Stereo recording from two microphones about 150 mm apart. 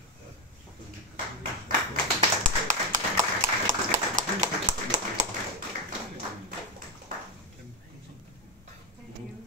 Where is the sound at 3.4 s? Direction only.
60° right (ahead or behind).